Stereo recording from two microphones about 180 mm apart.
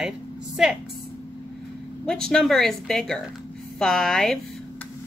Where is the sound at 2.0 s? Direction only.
5° left (ahead or behind).